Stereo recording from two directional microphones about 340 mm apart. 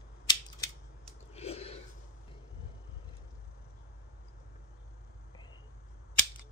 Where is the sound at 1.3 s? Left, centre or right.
Centre.